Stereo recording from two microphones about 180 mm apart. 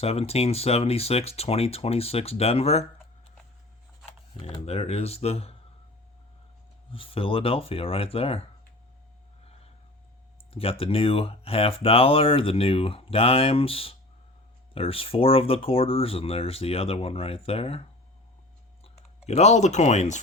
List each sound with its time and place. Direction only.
0.0 s speech: 35° left (ahead or behind)
4.4 s speech: 35° left (ahead or behind)
6.9 s speech: 30° left (ahead or behind)
10.5 s speech: 30° left (ahead or behind)
19.2 s speech: 35° left (ahead or behind)